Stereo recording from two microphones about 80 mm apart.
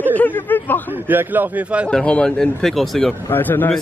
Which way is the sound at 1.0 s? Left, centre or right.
Right.